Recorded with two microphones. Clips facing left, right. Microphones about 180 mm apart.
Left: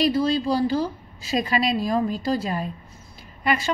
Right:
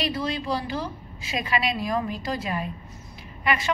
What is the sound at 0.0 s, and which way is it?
A woman's voice, 35° left (ahead or behind).